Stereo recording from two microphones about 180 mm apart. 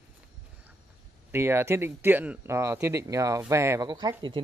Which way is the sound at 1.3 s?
15° right (ahead or behind).